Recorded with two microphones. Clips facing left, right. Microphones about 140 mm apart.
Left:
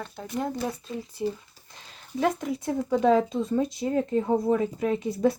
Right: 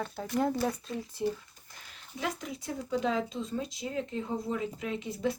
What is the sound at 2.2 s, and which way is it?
Speech, 50° left (ahead or behind).